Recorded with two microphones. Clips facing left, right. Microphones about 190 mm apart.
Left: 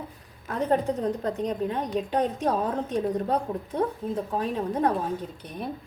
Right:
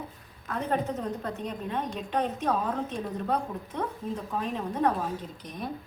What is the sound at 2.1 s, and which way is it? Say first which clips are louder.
A woman's voice: left 2 dB; 35° left (ahead or behind).